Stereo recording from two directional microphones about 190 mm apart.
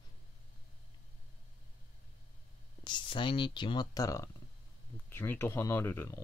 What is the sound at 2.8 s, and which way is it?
Speech, 25° left (ahead or behind).